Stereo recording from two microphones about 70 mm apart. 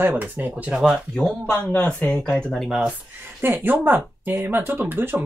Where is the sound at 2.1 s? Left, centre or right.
Centre.